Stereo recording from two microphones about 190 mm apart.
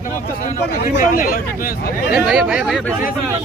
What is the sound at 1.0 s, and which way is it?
Speech, 45° left (ahead or behind).